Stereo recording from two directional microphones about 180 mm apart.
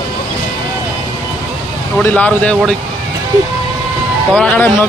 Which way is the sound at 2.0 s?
10° left (ahead or behind).